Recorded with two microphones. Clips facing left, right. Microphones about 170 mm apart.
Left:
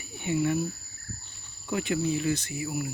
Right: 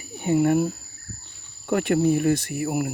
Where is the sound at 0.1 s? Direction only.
40° right (ahead or behind).